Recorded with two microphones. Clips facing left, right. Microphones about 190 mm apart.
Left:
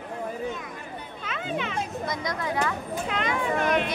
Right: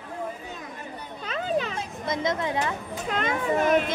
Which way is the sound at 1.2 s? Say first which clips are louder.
Right 4 dB; 35° right (ahead or behind).